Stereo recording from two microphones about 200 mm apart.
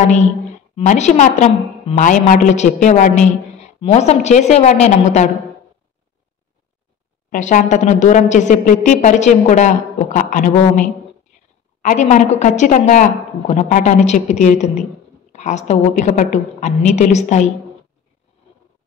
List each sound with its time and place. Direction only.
0.7 s a woman's voice: 35° left (ahead or behind)
7.2 s a woman's voice: 40° left (ahead or behind)